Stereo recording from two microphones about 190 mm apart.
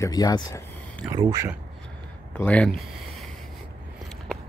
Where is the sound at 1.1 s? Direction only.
20° right (ahead or behind).